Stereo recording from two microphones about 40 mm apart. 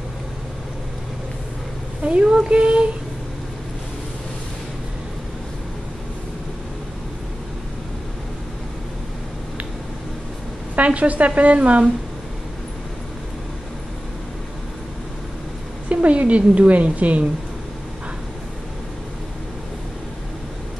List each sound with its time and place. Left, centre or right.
2.0 s speech: right
10.8 s a woman's voice: right
15.9 s a woman's voice: right